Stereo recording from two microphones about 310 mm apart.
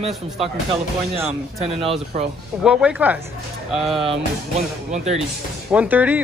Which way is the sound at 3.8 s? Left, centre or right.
Centre.